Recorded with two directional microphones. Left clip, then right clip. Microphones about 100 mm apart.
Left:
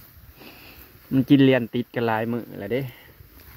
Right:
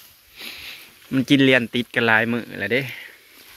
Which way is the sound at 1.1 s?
55° left (ahead or behind).